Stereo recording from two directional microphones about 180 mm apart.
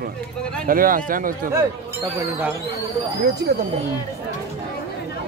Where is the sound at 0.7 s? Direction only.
50° right (ahead or behind).